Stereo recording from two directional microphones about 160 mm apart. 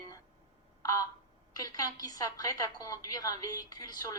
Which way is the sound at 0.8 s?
20° left (ahead or behind).